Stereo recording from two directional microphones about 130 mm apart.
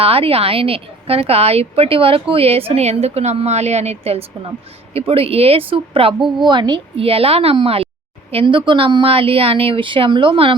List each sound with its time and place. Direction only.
0.0 s a woman's voice: 45° right (ahead or behind)